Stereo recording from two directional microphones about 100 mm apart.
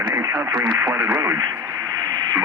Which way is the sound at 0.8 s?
25° right (ahead or behind).